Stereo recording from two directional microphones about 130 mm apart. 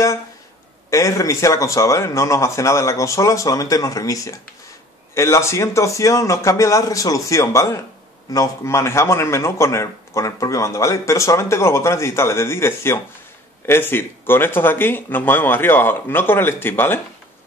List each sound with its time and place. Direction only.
0.8 s speech: 25° left (ahead or behind)